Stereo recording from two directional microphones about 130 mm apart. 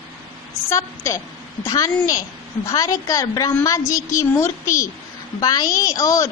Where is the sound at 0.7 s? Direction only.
20° left (ahead or behind).